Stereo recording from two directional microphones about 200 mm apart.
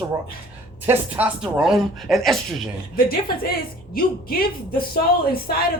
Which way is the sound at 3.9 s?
50° left (ahead or behind).